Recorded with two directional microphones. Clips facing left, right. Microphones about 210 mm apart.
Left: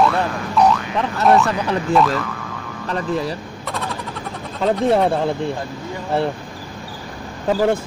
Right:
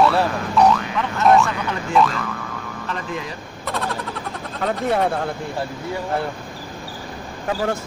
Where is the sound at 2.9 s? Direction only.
35° left (ahead or behind).